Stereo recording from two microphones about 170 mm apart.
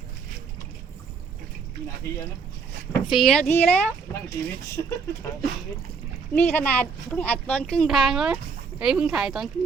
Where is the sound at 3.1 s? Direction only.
Centre (ahead or behind).